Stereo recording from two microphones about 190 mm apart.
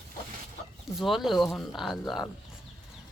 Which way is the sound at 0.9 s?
Centre (ahead or behind).